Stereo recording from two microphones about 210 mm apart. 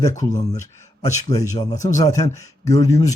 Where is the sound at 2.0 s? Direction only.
15° left (ahead or behind).